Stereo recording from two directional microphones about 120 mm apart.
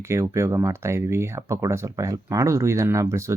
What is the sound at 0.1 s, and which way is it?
Speech, 25° right (ahead or behind).